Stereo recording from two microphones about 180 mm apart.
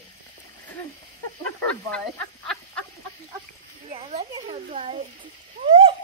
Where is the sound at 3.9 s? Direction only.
35° right (ahead or behind).